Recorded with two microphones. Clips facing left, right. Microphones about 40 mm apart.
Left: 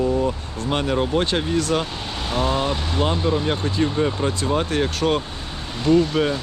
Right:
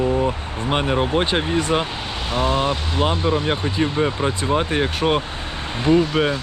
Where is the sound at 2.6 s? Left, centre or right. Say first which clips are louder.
Right 2 dB; centre.